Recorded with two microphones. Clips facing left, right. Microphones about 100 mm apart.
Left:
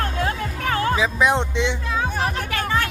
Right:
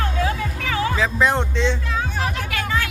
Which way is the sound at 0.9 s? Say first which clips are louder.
Even; 15° left (ahead or behind).